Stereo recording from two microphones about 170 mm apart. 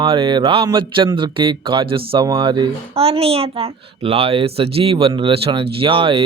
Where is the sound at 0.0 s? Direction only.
30° right (ahead or behind).